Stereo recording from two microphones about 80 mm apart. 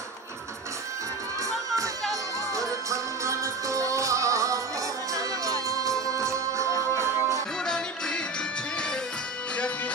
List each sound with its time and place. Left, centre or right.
2.5 s music: right
7.6 s music: centre